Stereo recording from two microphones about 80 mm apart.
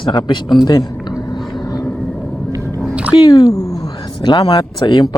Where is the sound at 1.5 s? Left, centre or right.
Left.